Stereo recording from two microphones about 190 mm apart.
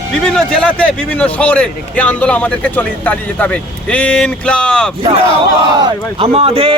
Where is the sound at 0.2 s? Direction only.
5° left (ahead or behind).